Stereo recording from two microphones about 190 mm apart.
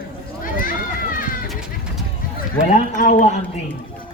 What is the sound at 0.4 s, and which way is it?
Run, 45° left (ahead or behind).